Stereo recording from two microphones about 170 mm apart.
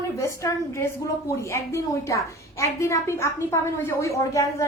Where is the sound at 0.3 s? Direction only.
15° left (ahead or behind).